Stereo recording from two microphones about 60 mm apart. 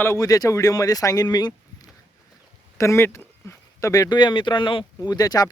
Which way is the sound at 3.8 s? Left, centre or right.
Left.